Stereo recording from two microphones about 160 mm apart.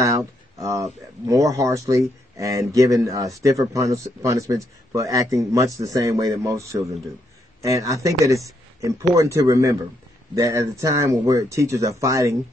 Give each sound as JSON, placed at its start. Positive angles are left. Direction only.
{"t": 0.6, "sound": "speech", "side_deg": -20}